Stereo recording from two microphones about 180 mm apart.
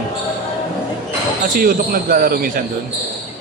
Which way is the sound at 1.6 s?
55° right (ahead or behind).